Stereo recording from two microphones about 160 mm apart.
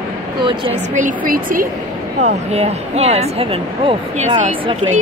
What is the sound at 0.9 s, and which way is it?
Speech, 55° right (ahead or behind).